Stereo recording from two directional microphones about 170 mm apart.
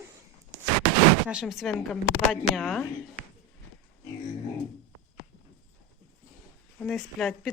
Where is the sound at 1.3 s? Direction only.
5° right (ahead or behind).